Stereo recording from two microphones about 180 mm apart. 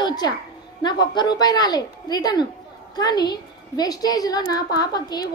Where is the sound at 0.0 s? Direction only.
25° left (ahead or behind).